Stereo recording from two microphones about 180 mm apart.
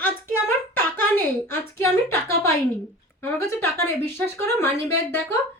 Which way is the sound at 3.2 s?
15° left (ahead or behind).